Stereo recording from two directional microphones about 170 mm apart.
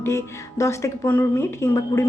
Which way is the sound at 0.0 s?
15° left (ahead or behind).